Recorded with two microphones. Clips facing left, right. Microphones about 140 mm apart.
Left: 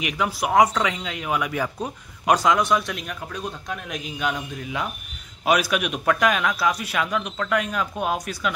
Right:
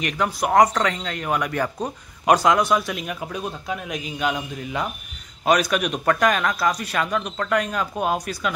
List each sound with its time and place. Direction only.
0.0 s a man's voice: 5° left (ahead or behind)